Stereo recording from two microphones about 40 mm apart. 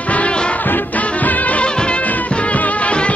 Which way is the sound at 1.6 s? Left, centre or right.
Left.